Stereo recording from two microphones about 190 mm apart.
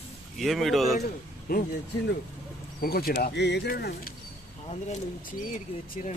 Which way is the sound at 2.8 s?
50° left (ahead or behind).